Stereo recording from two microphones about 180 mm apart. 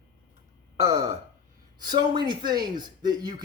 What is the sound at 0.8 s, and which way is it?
Gasp, 15° right (ahead or behind).